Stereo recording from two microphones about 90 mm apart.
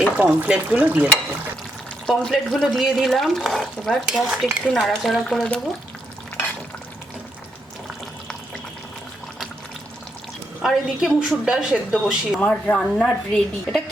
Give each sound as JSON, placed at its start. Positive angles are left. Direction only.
{"t": 0.2, "sound": "speech", "side_deg": -15}
{"t": 2.0, "sound": "speech", "side_deg": 5}
{"t": 4.1, "sound": "stir", "side_deg": -5}
{"t": 4.7, "sound": "speech", "side_deg": 0}
{"t": 10.6, "sound": "speech", "side_deg": -5}
{"t": 12.4, "sound": "a woman's voice", "side_deg": 15}